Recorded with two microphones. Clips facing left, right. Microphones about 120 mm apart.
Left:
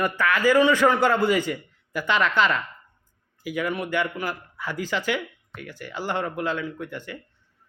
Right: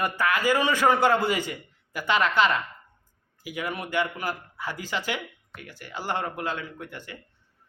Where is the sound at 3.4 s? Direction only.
15° right (ahead or behind).